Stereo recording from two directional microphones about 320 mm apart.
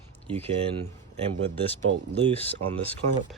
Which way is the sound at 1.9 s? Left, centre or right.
Right.